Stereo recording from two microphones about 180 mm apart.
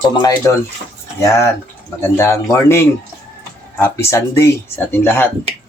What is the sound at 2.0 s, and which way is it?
Speech, 15° left (ahead or behind).